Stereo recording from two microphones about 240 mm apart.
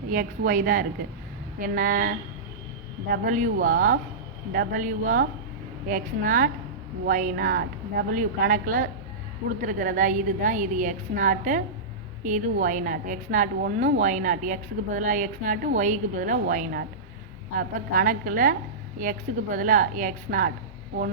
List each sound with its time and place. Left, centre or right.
0.1 s a woman's voice: right